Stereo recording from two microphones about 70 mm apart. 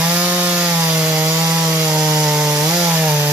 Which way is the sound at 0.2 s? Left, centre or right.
Centre.